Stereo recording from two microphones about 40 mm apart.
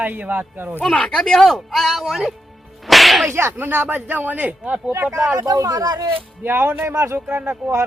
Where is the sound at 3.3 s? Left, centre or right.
Right.